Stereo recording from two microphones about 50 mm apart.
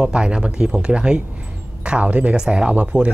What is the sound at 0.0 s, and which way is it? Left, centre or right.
Speech, centre.